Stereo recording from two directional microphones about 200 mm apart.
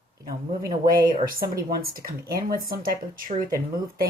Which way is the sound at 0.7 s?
45° right (ahead or behind).